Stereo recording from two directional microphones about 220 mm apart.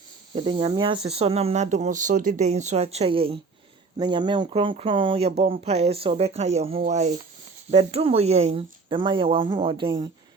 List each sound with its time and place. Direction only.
0.3 s speech: 25° right (ahead or behind)